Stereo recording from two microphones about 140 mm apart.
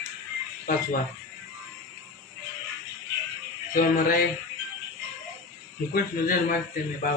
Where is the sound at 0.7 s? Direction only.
90° left.